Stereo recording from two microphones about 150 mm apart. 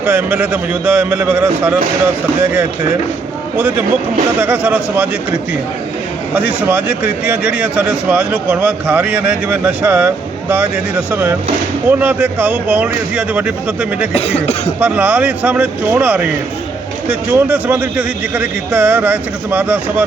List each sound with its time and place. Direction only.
0.0 s a man's voice: 10° right (ahead or behind)
4.4 s a man's voice: 10° right (ahead or behind)
6.3 s a man's voice: 10° right (ahead or behind)
14.1 s speech: 45° left (ahead or behind)
14.8 s a man's voice: 10° right (ahead or behind)